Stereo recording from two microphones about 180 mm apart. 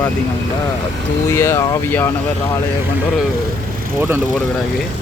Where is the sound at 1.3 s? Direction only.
15° left (ahead or behind).